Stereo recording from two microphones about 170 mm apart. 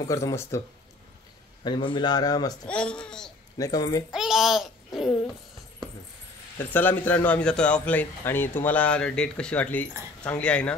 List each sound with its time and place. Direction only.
0.1 s a man's voice: 15° left (ahead or behind)
1.6 s a man's voice: 30° left (ahead or behind)
2.6 s speech: 5° left (ahead or behind)
3.5 s a man's voice: 20° left (ahead or behind)
4.1 s babbling: 5° right (ahead or behind)
6.7 s a man's voice: 10° left (ahead or behind)